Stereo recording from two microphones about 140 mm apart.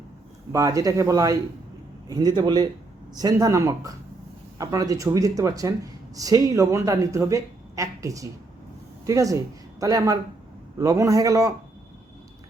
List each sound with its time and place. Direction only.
0.5 s speech: 25° right (ahead or behind)